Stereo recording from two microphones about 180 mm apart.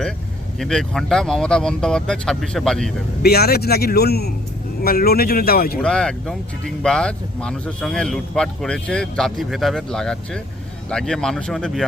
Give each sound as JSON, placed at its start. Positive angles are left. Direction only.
{"t": 0.6, "sound": "a man's voice", "side_deg": 5}
{"t": 3.2, "sound": "a man's voice", "side_deg": 60}
{"t": 5.8, "sound": "a man's voice", "side_deg": 5}